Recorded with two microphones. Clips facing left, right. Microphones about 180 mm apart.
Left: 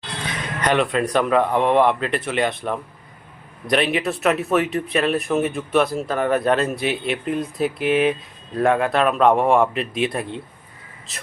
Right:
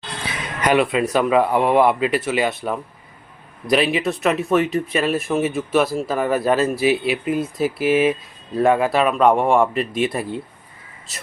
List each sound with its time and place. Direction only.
0.3 s speech: 10° right (ahead or behind)